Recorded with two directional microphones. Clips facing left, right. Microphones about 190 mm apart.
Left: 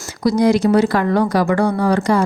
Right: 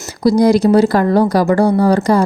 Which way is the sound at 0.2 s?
35° right (ahead or behind).